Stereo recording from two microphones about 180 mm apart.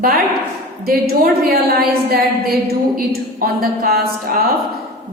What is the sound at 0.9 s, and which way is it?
A woman's voice, 55° right (ahead or behind).